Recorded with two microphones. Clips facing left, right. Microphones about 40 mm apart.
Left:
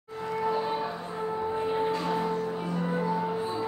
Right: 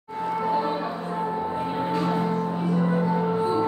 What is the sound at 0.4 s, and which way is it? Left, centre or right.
Music, right.